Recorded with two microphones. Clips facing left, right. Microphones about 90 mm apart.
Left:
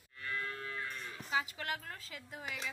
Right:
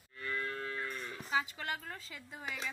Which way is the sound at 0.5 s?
40° right (ahead or behind).